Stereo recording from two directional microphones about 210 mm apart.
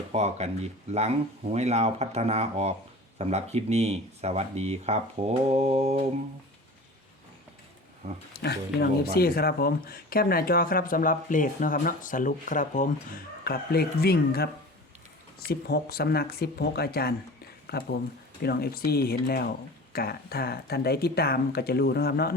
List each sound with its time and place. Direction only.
0.1 s speech: 30° right (ahead or behind)
8.3 s speech: 50° left (ahead or behind)